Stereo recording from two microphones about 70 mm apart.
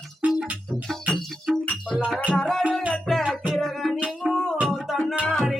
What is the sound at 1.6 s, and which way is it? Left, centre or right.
Music, centre.